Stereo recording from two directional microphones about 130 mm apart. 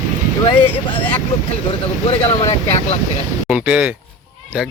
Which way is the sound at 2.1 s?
50° left (ahead or behind).